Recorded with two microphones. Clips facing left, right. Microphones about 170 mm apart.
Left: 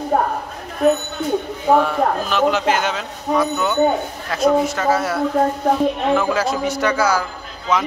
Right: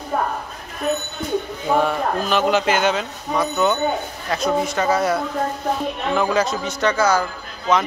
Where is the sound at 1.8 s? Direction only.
Centre (ahead or behind).